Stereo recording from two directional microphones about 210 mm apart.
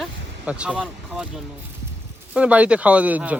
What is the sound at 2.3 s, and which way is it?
Speech, 5° right (ahead or behind).